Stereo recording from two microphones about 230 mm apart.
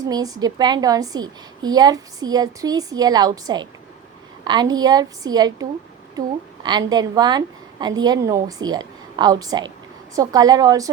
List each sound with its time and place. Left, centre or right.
0.1 s a woman's voice: centre